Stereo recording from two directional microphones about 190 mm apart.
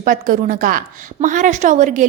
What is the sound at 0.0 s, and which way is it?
A woman's voice, 45° right (ahead or behind).